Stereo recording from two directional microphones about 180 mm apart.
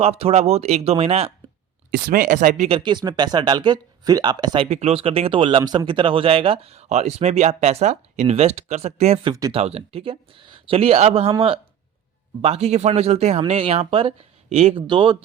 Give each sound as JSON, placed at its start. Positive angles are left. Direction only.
{"t": 0.0, "sound": "speech", "side_deg": -35}
{"t": 1.9, "sound": "speech", "side_deg": -50}